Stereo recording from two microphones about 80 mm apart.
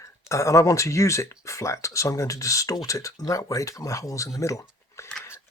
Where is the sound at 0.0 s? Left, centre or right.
Left.